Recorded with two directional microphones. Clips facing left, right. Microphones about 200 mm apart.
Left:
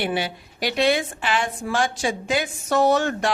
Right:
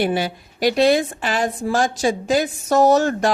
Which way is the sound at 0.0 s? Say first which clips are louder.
Right 5 dB; 40° right (ahead or behind).